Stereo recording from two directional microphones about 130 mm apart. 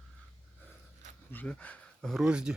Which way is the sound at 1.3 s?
10° left (ahead or behind).